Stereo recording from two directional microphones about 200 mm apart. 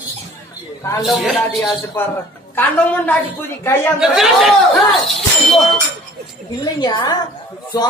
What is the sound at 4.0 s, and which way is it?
Speech, centre (ahead or behind).